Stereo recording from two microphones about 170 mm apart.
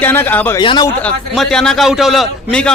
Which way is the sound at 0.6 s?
30° left (ahead or behind).